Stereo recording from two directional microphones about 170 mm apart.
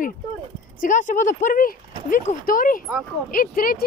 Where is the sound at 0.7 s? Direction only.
45° left (ahead or behind).